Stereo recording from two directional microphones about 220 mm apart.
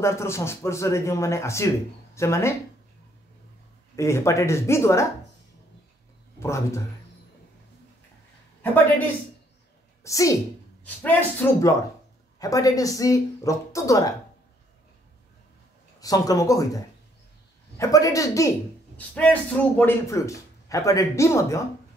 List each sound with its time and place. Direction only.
0.0 s a man's voice: 10° left (ahead or behind)
3.9 s a man's voice: 15° left (ahead or behind)
6.4 s a man's voice: 10° left (ahead or behind)
10.0 s a woman's voice: 15° left (ahead or behind)
16.0 s a man's voice: 15° left (ahead or behind)